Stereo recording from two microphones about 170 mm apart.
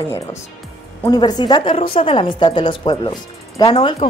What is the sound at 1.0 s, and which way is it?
Speech, 25° left (ahead or behind).